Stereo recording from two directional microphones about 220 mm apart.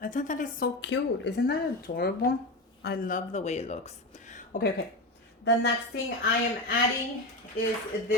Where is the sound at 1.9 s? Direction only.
35° left (ahead or behind).